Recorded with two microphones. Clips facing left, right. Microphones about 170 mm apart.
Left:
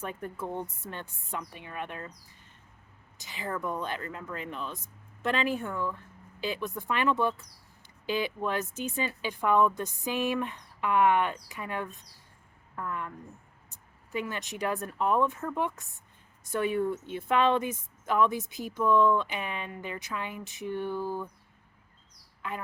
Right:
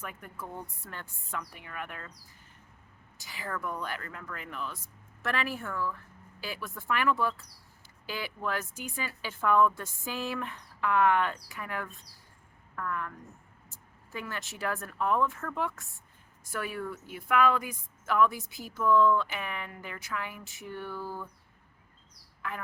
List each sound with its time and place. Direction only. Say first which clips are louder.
0.0 s a woman's voice: left 6 dB; 30° left (ahead or behind)
3.2 s a woman's voice: left 3 dB; 20° left (ahead or behind)
22.4 s a sound: left 2 dB; 20° left (ahead or behind)